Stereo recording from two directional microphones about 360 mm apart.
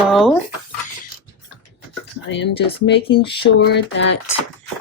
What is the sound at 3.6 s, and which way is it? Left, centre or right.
Speech, left.